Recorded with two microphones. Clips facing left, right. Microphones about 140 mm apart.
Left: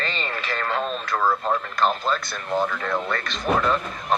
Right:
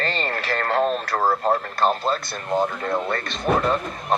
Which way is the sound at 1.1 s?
40° right (ahead or behind).